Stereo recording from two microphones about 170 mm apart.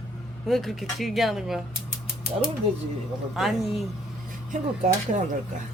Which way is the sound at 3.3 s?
Centre (ahead or behind).